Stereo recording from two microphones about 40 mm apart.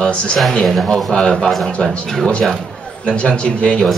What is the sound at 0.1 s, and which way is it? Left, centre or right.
Speech, left.